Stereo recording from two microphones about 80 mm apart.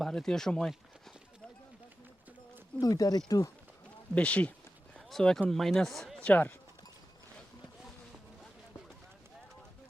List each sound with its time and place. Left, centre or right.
0.0 s speech: centre
2.8 s speech: left
4.1 s speech: centre
6.1 s speech: centre